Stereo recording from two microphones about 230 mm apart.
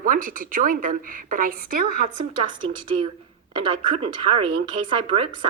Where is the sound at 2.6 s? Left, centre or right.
Right.